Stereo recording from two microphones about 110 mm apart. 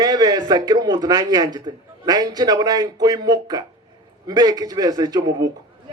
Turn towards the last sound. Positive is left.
turn(degrees=-35)  # may be behind; listen again after turning